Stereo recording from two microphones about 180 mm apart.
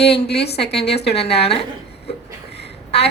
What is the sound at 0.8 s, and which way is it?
Speech, 35° left (ahead or behind).